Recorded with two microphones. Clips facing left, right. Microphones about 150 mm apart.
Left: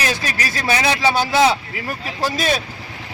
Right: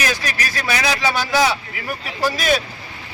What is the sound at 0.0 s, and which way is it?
A man's voice, 30° left (ahead or behind).